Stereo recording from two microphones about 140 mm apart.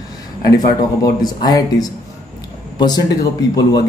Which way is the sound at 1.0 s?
30° left (ahead or behind).